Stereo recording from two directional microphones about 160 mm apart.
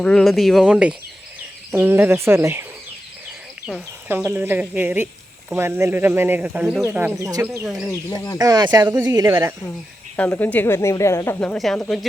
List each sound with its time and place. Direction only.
0.0 s speech: 5° left (ahead or behind); by 2.6 s 15° right (ahead or behind)
3.7 s speech: 5° right (ahead or behind)
4.1 s speech: 15° right (ahead or behind)
7.9 s speech: 20° left (ahead or behind)
8.4 s speech: 25° right (ahead or behind)
10.2 s speech: 10° left (ahead or behind)